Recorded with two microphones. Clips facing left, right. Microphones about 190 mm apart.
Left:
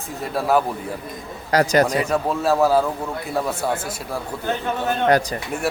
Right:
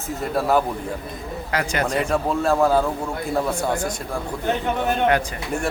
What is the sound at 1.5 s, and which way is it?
Speech, 40° left (ahead or behind).